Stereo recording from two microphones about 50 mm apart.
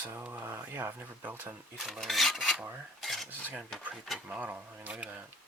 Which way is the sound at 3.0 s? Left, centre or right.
Centre.